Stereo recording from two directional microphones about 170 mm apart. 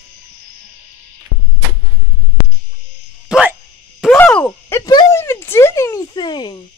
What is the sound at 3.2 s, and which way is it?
Dog, 5° right (ahead or behind).